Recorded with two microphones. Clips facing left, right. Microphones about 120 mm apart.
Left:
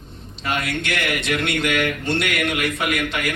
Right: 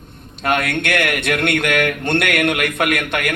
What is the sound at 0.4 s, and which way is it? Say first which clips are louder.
Speech: right 6 dB; 55° right (ahead or behind).